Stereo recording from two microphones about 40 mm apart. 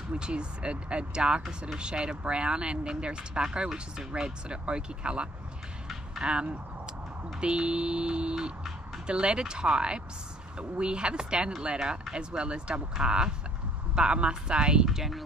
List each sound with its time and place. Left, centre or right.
0.1 s speech: right
14.9 s speech: centre